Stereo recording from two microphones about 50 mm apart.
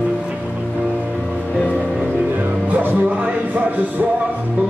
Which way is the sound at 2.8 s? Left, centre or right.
Right.